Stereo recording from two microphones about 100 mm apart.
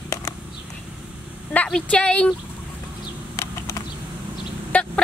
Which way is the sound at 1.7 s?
10° left (ahead or behind).